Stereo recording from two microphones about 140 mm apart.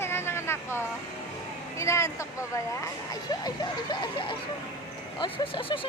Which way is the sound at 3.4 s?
30° left (ahead or behind).